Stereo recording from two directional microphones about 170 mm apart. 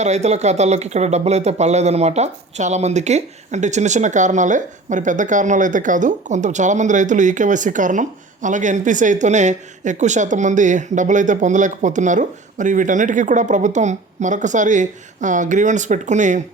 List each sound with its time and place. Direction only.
0.0 s speech: 40° right (ahead or behind)